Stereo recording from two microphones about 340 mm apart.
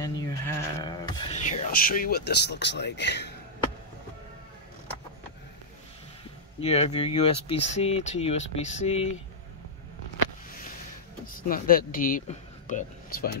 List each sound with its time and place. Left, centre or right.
0.0 s a sound: centre; by 3.3 s left
6.6 s speech: centre
11.3 s speech: left